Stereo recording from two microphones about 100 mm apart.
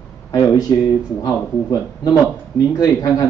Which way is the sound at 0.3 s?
40° left (ahead or behind).